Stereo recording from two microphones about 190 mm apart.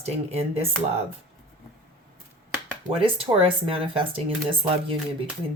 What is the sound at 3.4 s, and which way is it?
Speech, 30° right (ahead or behind).